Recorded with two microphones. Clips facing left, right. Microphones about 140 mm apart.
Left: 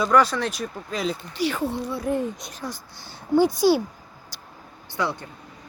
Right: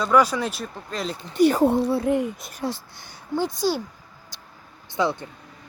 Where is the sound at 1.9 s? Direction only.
30° right (ahead or behind).